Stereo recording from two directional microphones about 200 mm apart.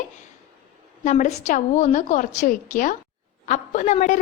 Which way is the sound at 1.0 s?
40° left (ahead or behind).